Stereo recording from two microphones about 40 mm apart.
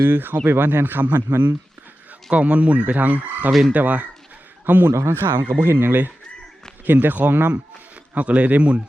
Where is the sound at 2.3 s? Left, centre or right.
Right.